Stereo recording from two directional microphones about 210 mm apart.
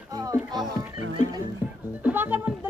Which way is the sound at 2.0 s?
10° right (ahead or behind).